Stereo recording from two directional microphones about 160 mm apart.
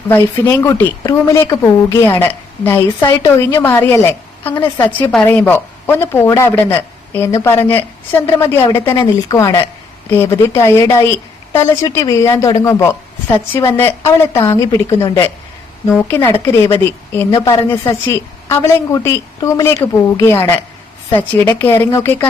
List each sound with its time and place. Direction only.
0.1 s a woman's voice: 15° left (ahead or behind)